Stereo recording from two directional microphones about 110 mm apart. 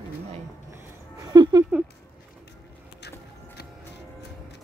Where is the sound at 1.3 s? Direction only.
35° right (ahead or behind).